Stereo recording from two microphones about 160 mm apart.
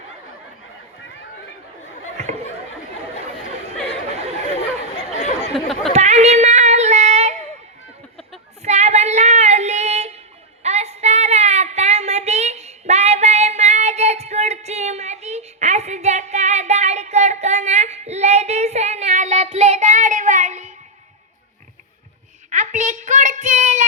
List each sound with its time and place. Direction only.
2.1 s a sound: 45° right (ahead or behind)
5.5 s chatter: centre (ahead or behind)
5.9 s child singing: 45° right (ahead or behind)
8.6 s female singing: 45° right (ahead or behind)
10.6 s child singing: 40° right (ahead or behind)
22.4 s a sound: 50° right (ahead or behind)